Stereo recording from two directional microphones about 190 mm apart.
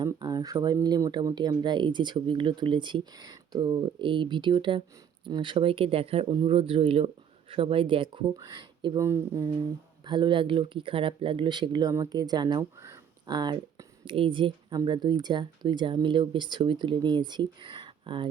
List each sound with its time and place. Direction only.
0.0 s speech: 20° right (ahead or behind)
10.1 s speech: 25° right (ahead or behind)